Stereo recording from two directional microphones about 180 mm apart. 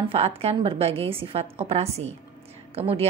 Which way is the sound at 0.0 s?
30° right (ahead or behind).